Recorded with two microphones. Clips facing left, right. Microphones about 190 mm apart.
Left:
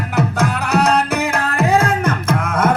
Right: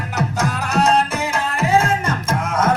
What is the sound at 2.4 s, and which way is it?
Music, 55° left (ahead or behind).